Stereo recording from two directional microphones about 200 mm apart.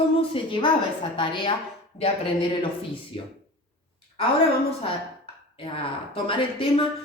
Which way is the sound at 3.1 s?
30° left (ahead or behind).